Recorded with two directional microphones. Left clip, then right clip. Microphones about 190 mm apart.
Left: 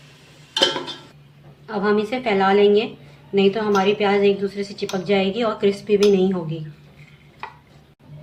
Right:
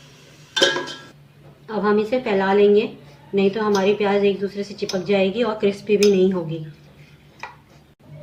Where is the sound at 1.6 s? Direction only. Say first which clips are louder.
Right 1 dB; 25° left (ahead or behind).